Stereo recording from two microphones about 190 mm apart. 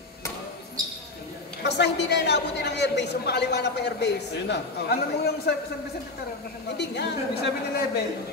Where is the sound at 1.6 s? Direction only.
65° left (ahead or behind).